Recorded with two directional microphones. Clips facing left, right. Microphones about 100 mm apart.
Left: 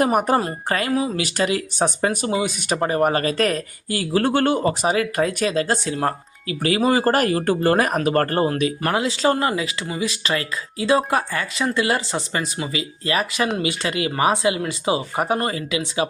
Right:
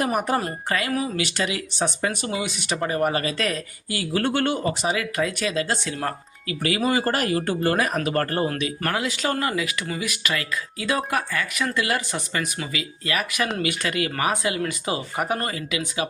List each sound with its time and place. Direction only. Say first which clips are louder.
0.0 s speech: left 5 dB; 40° left (ahead or behind)
1.2 s speech: left 4 dB; 40° left (ahead or behind)